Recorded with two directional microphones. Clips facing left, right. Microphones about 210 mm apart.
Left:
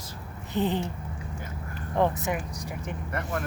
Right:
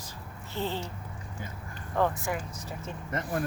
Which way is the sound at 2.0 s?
20° left (ahead or behind).